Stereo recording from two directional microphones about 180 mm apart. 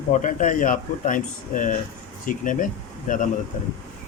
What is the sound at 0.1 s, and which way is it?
Speech, 45° left (ahead or behind).